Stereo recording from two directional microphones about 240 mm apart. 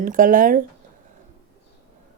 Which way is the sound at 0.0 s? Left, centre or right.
Right.